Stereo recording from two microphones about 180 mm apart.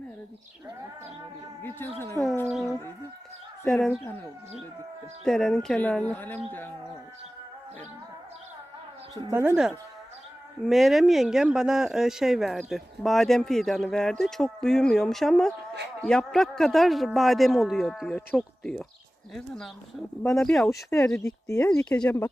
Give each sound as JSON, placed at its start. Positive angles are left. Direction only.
{"t": 2.5, "sound": "speech", "side_deg": 0}
{"t": 5.2, "sound": "speech", "side_deg": 5}
{"t": 9.1, "sound": "speech", "side_deg": -20}
{"t": 10.7, "sound": "speech", "side_deg": 0}
{"t": 21.2, "sound": "speech", "side_deg": 20}
{"t": 21.6, "sound": "speech", "side_deg": 5}